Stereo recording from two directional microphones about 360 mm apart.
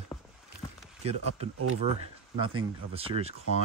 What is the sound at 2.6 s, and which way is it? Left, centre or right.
Speech, centre.